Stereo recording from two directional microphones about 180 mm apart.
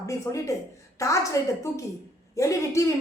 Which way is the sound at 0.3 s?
15° left (ahead or behind).